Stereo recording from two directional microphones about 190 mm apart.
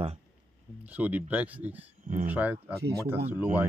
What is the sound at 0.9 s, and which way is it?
Speech, 10° right (ahead or behind).